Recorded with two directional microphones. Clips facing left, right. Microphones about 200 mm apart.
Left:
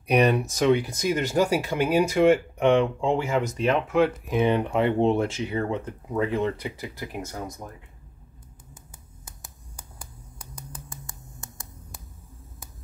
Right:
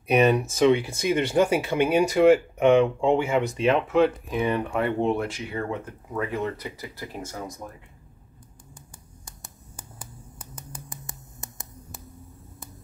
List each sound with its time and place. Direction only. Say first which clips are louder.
0.1 s speech: right 1 dB; centre (ahead or behind)
4.3 s speech: left 3 dB; 20° left (ahead or behind)
9.2 s a sound: even; centre (ahead or behind)
10.9 s finger snapping: right 1 dB; 20° right (ahead or behind)